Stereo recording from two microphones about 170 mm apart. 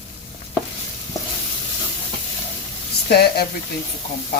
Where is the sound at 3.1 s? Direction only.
65° left (ahead or behind).